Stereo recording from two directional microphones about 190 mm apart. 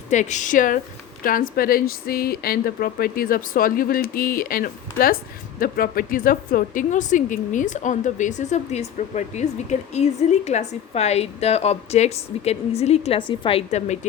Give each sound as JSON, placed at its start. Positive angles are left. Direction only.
{"t": 0.1, "sound": "speech", "side_deg": 40}